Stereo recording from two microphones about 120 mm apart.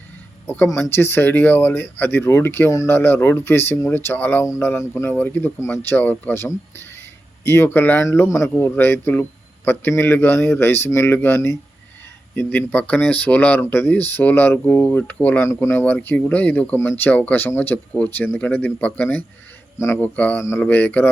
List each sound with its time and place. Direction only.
0.4 s speech: 15° left (ahead or behind)